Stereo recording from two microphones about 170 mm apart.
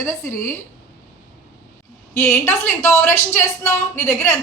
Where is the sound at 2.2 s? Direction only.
15° left (ahead or behind).